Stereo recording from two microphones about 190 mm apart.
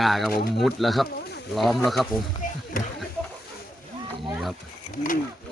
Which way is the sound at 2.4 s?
45° left (ahead or behind).